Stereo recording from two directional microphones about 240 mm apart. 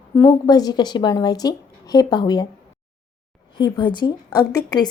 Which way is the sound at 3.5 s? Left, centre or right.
Centre.